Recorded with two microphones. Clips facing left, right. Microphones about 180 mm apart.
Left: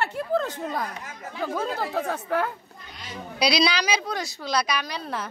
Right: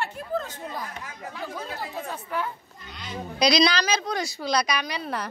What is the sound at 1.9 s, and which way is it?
Speech, 70° left (ahead or behind).